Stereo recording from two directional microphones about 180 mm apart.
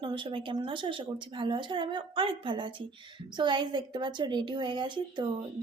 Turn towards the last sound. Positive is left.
turn(degrees=-25)  # may be behind; listen again after turning